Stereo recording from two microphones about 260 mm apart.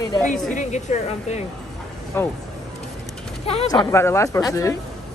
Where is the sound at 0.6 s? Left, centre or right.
Left.